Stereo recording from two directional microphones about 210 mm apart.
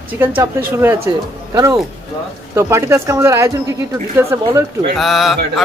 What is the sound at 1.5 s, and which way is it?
Speech, 15° right (ahead or behind).